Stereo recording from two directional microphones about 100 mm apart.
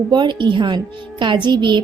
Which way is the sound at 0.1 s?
50° right (ahead or behind).